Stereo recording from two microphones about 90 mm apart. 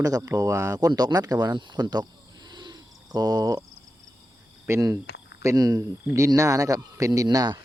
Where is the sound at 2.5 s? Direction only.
50° right (ahead or behind).